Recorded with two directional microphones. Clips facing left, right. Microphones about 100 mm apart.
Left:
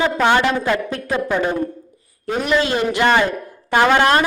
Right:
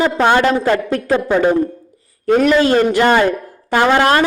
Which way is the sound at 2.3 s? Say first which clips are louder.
Right 7 dB; 45° right (ahead or behind).